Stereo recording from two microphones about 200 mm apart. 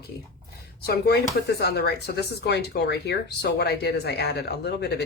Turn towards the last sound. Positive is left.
turn(degrees=55)  # may be behind; listen again after turning